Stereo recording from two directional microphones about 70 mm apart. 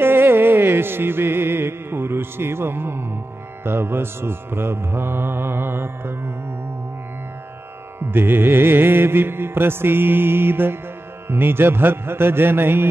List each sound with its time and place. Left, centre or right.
0.0 s music: right
8.0 s music: right